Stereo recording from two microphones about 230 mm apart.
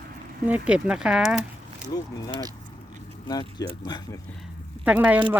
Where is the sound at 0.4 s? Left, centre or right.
Centre.